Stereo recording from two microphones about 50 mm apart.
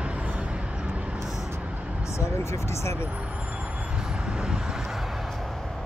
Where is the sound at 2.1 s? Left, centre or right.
Left.